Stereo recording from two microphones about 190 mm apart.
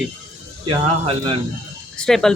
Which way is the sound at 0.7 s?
30° right (ahead or behind).